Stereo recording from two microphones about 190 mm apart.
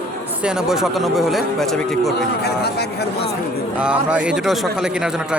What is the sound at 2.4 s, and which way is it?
Speech, 60° left (ahead or behind).